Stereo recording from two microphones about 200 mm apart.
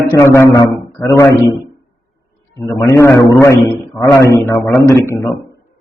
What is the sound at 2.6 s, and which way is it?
A man's voice, 15° left (ahead or behind).